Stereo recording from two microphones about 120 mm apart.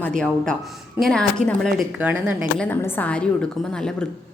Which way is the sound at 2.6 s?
15° left (ahead or behind).